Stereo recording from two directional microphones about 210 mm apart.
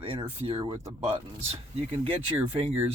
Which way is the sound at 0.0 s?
25° right (ahead or behind).